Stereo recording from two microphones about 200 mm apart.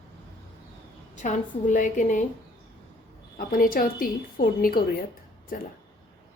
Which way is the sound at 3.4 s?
45° left (ahead or behind).